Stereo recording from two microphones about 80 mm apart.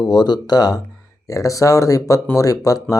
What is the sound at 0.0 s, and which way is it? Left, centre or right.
Speech, left.